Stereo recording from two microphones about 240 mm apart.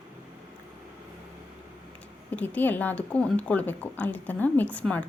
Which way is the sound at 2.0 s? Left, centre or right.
Centre.